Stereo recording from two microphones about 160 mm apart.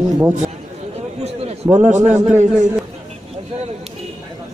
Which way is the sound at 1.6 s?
15° right (ahead or behind).